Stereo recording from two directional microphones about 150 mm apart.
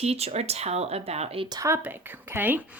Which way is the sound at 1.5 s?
20° right (ahead or behind).